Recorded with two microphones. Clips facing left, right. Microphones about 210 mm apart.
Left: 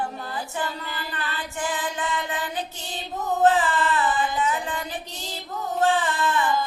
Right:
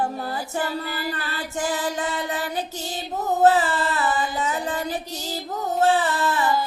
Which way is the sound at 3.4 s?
40° right (ahead or behind).